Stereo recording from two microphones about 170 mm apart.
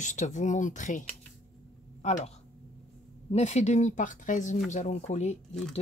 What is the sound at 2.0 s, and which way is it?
Speech, 45° left (ahead or behind).